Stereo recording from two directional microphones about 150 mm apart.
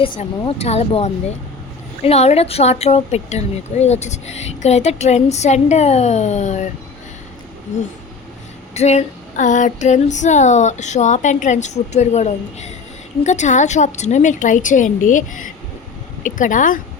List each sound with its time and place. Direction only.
0.0 s speech: 35° left (ahead or behind)
8.7 s a woman's voice: 50° left (ahead or behind)